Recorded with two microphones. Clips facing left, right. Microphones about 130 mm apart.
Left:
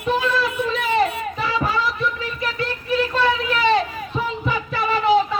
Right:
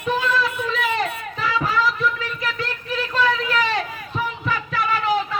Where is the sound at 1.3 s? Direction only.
10° left (ahead or behind).